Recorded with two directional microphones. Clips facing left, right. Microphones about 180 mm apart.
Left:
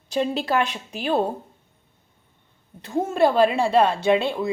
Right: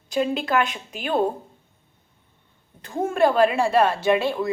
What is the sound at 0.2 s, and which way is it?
Speech, 35° left (ahead or behind).